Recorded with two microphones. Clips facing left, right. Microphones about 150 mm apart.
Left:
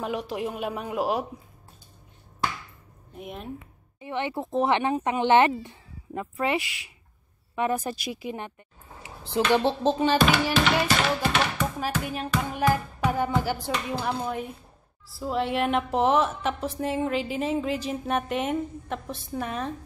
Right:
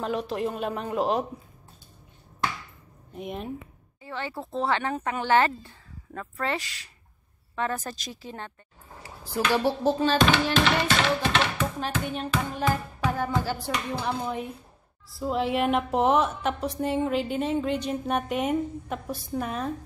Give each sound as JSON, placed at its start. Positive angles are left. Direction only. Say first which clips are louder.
{"t": 0.0, "sound": "a woman's voice", "louder": "right 1 dB", "side_deg": 10}
{"t": 3.2, "sound": "a woman's voice", "louder": "right 3 dB", "side_deg": 0}
{"t": 4.0, "sound": "a woman's voice", "louder": "left 5 dB", "side_deg": 20}
{"t": 10.1, "sound": "a woman's voice", "louder": "even", "side_deg": 10}
{"t": 11.5, "sound": "music", "louder": "left 1 dB", "side_deg": 5}
{"t": 14.0, "sound": "a woman's voice", "louder": "even", "side_deg": 5}